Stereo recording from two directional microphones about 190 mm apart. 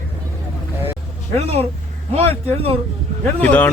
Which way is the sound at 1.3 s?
30° right (ahead or behind).